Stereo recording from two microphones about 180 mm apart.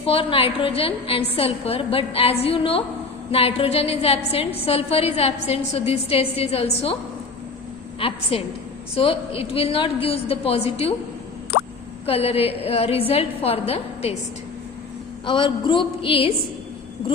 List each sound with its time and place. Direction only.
0.0 s a woman's voice: 30° left (ahead or behind)
7.9 s a woman's voice: 30° left (ahead or behind)
12.0 s a woman's voice: 35° left (ahead or behind)
15.3 s a sound: 25° left (ahead or behind)